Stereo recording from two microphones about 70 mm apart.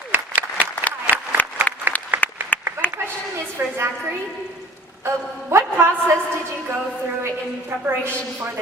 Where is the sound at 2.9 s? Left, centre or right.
Right.